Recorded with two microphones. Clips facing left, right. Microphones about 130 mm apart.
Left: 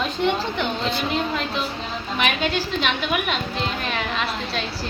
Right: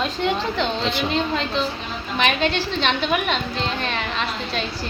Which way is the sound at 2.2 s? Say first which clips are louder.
Right 2 dB; 5° left (ahead or behind).